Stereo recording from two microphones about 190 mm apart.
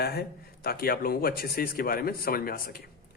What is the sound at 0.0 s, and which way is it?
A man's voice, 55° left (ahead or behind).